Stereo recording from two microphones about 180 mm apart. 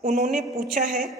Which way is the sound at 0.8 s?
45° right (ahead or behind).